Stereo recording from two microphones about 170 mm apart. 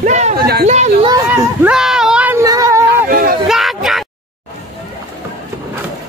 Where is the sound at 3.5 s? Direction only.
Centre (ahead or behind).